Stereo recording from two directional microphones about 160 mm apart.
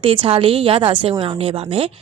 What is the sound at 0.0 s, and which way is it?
A woman's voice, 30° right (ahead or behind).